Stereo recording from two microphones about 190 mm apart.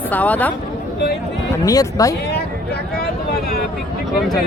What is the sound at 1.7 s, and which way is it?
Speech, 20° left (ahead or behind).